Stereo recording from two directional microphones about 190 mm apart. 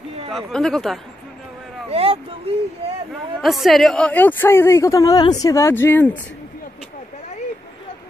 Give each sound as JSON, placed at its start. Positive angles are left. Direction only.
{"t": 0.3, "sound": "speech", "side_deg": 0}
{"t": 1.9, "sound": "speech", "side_deg": -30}
{"t": 3.3, "sound": "a woman's voice", "side_deg": 0}